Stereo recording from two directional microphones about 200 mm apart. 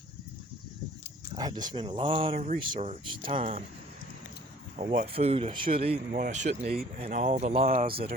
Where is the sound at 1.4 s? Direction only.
20° right (ahead or behind).